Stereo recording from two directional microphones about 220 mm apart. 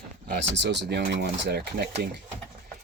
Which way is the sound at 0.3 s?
50° right (ahead or behind).